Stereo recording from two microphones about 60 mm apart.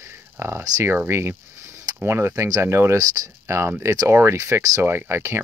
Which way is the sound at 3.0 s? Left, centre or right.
Right.